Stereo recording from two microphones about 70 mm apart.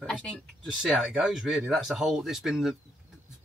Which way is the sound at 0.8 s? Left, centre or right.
Centre.